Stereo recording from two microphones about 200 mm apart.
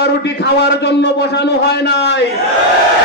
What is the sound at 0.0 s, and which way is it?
A man's voice, 60° left (ahead or behind).